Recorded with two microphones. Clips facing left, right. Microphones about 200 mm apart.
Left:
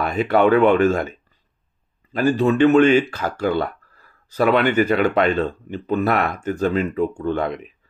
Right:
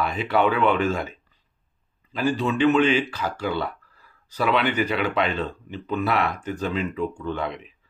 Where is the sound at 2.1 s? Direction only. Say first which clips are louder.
Left 6 dB; 50° left (ahead or behind).